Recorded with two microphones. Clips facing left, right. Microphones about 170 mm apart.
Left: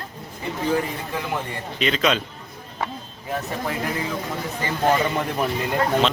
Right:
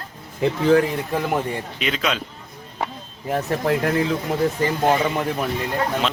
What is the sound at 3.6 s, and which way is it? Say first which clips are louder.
Speech: right 8 dB; 70° right (ahead or behind).